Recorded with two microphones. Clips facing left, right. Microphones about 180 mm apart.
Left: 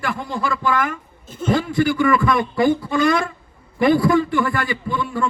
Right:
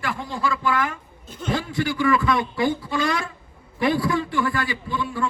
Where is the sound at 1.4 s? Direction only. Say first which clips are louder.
Left 6 dB; 50° left (ahead or behind).